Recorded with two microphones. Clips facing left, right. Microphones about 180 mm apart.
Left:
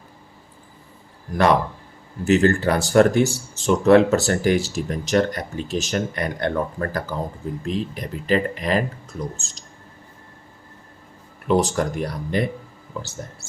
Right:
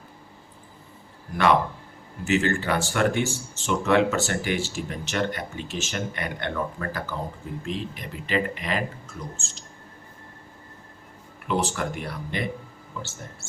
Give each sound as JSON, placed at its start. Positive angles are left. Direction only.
{"t": 2.2, "sound": "speech", "side_deg": 40}
{"t": 11.4, "sound": "speech", "side_deg": 40}